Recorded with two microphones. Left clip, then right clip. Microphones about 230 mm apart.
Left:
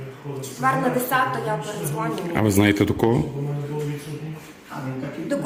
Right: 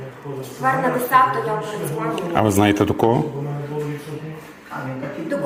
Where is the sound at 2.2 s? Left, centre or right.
Left.